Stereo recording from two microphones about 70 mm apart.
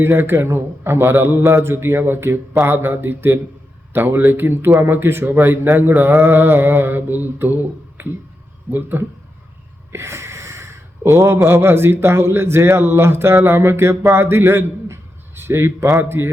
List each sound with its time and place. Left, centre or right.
0.0 s a man's voice: right
9.9 s a man's voice: right